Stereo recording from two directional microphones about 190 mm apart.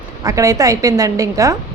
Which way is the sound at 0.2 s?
15° right (ahead or behind).